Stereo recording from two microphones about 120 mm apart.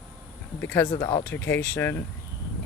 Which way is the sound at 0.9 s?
35° left (ahead or behind).